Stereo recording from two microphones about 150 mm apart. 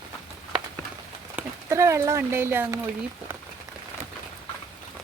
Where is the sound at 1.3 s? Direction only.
20° right (ahead or behind).